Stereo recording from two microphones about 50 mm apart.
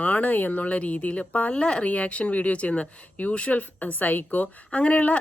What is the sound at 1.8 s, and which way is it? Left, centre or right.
Speech, left.